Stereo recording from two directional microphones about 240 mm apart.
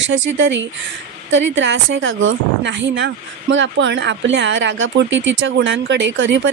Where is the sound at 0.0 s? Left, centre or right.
Right.